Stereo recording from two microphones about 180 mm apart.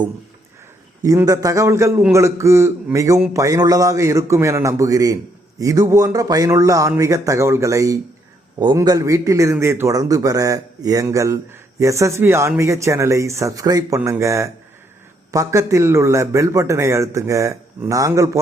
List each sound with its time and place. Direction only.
1.0 s a man's voice: 20° right (ahead or behind)